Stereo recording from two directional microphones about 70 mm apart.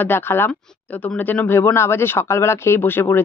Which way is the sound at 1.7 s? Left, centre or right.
Left.